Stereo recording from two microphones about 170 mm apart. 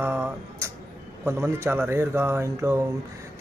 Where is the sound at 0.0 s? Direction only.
15° right (ahead or behind).